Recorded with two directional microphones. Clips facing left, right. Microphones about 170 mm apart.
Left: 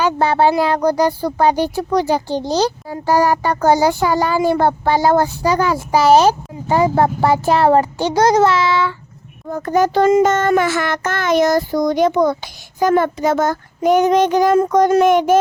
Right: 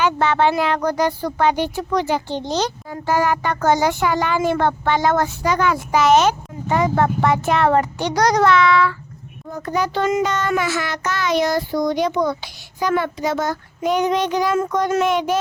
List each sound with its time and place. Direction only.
0.0 s speech: 35° left (ahead or behind)
9.5 s speech: 50° left (ahead or behind)